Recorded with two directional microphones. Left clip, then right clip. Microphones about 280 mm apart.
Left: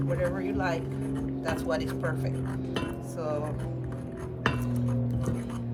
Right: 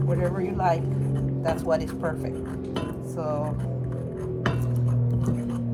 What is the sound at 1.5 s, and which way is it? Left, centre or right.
Speech, centre.